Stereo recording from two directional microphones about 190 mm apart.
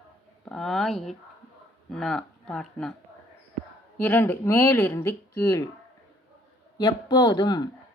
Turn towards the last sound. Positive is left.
turn(degrees=20)  # may be behind; listen again after turning